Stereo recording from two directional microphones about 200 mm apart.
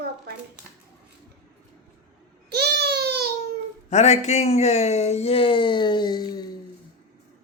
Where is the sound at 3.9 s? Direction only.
35° left (ahead or behind).